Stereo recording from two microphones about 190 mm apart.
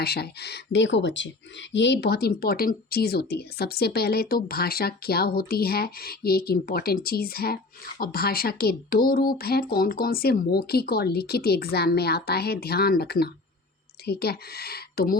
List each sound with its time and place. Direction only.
0.0 s speech: 55° left (ahead or behind)